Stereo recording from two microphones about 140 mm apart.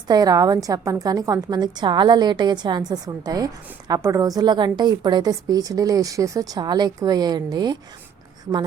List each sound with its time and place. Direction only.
0.1 s a woman's voice: 25° right (ahead or behind)